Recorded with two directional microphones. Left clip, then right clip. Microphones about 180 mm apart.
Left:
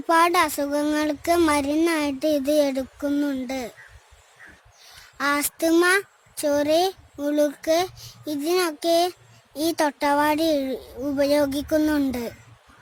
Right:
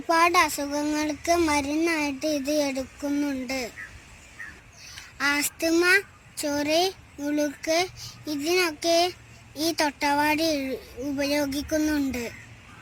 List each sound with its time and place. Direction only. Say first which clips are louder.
0.1 s speech: left 2 dB; 55° left (ahead or behind)
5.1 s a woman's voice: left 2 dB; 55° left (ahead or behind)